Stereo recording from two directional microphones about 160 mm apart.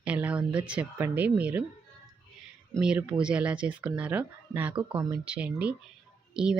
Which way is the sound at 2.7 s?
5° right (ahead or behind).